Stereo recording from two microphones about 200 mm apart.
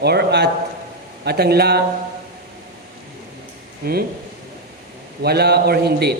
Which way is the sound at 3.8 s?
50° right (ahead or behind).